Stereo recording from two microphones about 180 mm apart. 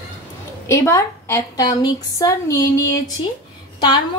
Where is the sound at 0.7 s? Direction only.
15° left (ahead or behind).